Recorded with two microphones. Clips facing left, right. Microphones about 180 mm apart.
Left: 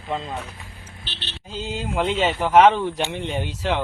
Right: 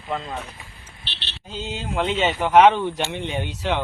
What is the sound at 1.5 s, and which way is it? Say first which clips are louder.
Speech: left 1 dB; 5° left (ahead or behind).